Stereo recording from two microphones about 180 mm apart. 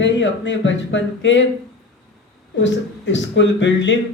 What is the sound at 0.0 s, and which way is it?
Speech, 90° left.